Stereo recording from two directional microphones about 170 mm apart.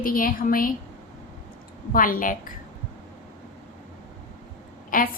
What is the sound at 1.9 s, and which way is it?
Speech, 55° left (ahead or behind).